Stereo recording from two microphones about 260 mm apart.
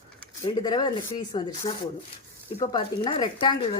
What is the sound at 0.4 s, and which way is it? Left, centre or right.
A woman's voice, centre.